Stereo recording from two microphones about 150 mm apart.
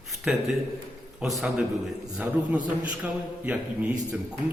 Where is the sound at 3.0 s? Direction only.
10° right (ahead or behind).